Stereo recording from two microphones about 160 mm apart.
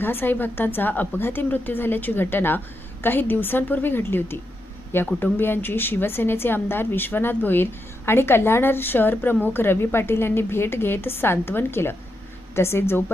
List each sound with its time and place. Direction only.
0.0 s a woman's voice: 10° left (ahead or behind)